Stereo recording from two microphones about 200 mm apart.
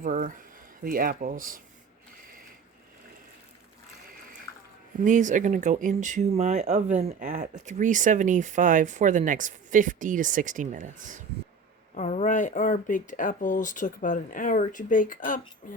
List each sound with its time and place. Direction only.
0.0 s speech: 35° right (ahead or behind)
4.9 s speech: 40° right (ahead or behind)
7.1 s speech: 45° right (ahead or behind)
11.9 s speech: 35° left (ahead or behind)